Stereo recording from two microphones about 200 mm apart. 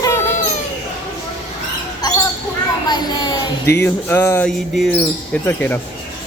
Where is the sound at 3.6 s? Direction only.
10° left (ahead or behind).